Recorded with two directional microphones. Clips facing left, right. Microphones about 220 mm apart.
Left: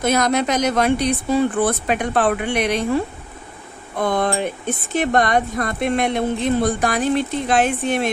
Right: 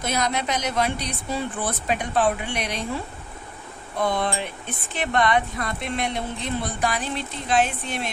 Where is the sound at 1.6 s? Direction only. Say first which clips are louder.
Left 7 dB; 65° left (ahead or behind).